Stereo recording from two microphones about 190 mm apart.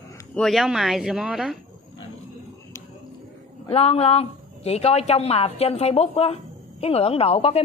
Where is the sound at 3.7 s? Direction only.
35° left (ahead or behind).